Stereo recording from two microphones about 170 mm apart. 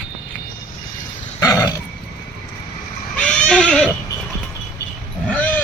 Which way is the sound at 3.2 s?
5° left (ahead or behind).